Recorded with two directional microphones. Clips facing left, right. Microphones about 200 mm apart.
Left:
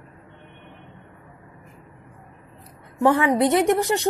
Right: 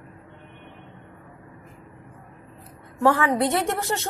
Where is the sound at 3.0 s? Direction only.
20° left (ahead or behind).